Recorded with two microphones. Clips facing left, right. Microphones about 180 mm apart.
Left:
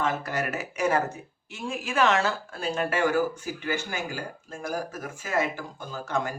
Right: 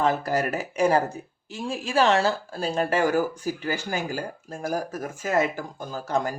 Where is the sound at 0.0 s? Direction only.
35° right (ahead or behind).